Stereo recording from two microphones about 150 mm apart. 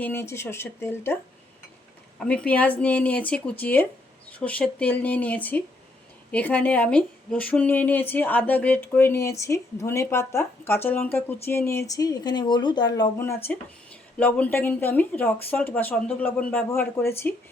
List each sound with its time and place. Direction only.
0.0 s a woman's voice: 15° left (ahead or behind)
13.1 s a woman's voice: 15° left (ahead or behind)